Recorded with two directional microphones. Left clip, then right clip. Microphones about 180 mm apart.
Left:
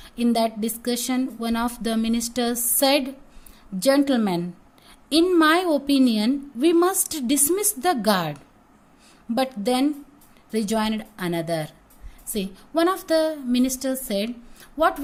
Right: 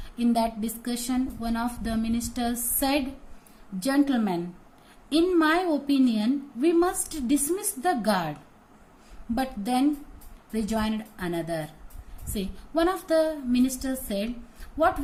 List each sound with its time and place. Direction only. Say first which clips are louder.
0.2 s a woman's voice: left 3 dB; 55° left (ahead or behind)